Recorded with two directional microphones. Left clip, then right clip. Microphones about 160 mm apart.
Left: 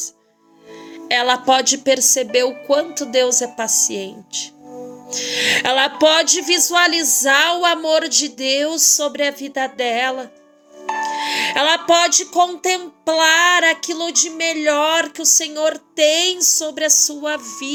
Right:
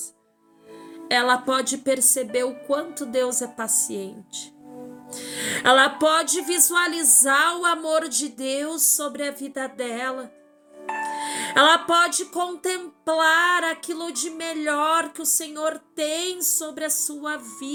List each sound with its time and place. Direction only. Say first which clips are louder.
1.0 s speech: left 5 dB; 20° right (ahead or behind)
10.8 s music: left 6 dB; 40° left (ahead or behind)
11.3 s speech: even; 20° right (ahead or behind)